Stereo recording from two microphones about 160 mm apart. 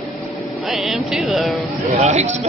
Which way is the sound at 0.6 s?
Centre (ahead or behind).